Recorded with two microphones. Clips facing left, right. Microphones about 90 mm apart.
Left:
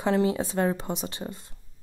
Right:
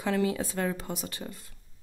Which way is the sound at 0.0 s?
25° left (ahead or behind).